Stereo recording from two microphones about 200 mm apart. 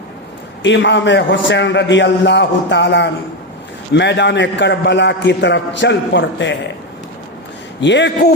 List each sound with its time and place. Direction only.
0.6 s a man's voice: 65° left (ahead or behind)
7.8 s a man's voice: 60° left (ahead or behind)